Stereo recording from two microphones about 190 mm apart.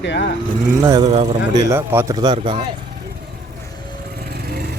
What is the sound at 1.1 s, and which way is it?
Speech, 35° right (ahead or behind).